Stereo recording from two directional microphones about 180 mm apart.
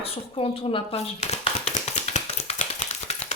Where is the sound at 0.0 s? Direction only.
30° left (ahead or behind).